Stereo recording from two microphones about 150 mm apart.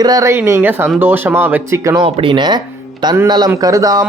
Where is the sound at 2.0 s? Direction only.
35° right (ahead or behind).